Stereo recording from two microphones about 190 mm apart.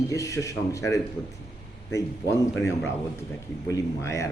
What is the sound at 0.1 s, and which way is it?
Speech, 15° left (ahead or behind).